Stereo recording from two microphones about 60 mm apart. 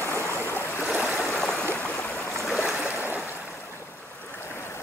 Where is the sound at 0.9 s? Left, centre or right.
Right.